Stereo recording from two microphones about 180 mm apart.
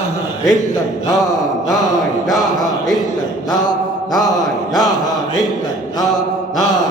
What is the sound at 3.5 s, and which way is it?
Mantra, 25° left (ahead or behind).